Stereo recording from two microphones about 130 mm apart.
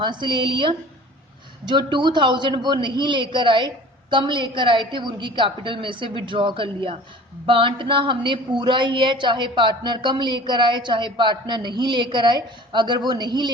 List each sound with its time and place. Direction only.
0.0 s a woman's voice: 35° right (ahead or behind)